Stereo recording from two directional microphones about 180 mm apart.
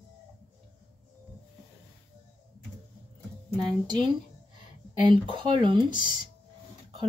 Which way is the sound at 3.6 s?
25° right (ahead or behind).